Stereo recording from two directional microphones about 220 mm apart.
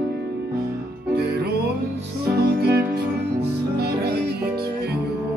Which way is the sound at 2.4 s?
45° right (ahead or behind).